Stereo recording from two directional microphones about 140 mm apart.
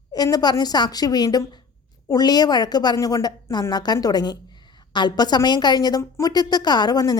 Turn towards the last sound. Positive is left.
turn(degrees=30)  # may be behind; listen again after turning